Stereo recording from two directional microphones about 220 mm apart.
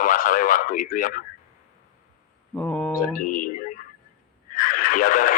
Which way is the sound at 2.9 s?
40° left (ahead or behind).